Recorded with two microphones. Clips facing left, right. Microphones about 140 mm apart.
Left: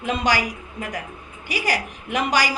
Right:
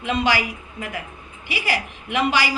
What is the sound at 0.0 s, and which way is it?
A woman's voice, 40° left (ahead or behind).